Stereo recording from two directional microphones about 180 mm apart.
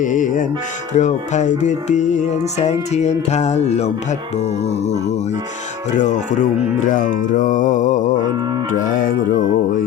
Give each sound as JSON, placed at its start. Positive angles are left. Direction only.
{"t": 0.0, "sound": "music", "side_deg": 45}
{"t": 6.0, "sound": "music", "side_deg": 40}